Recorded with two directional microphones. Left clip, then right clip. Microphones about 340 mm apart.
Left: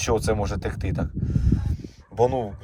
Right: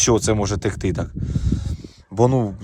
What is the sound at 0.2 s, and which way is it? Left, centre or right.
Speech, centre.